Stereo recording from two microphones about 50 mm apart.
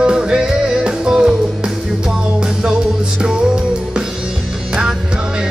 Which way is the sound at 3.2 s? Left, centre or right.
Centre.